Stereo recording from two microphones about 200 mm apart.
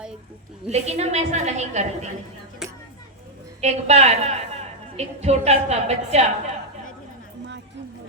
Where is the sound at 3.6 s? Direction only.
35° right (ahead or behind).